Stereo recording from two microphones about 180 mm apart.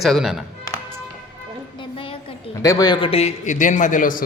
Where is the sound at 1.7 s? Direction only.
30° left (ahead or behind).